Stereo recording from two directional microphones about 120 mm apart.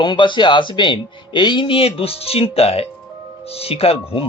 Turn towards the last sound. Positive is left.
turn(degrees=55)  # may be behind; listen again after turning